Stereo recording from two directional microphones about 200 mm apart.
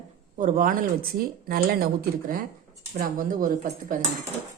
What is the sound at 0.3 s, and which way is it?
Speech, 40° right (ahead or behind).